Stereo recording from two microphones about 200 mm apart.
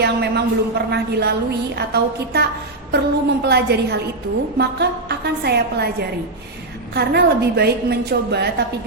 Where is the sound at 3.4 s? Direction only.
55° right (ahead or behind).